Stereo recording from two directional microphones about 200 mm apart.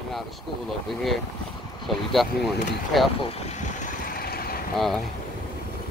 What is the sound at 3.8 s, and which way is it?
Vehicle, 50° left (ahead or behind).